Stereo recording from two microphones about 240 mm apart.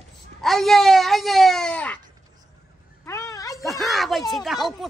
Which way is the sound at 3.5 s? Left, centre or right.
Centre.